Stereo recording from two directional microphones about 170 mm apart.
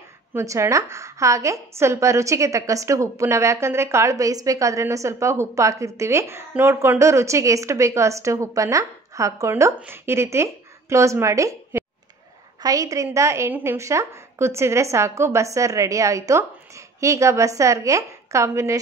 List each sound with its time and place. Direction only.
0.3 s a woman's voice: 15° right (ahead or behind)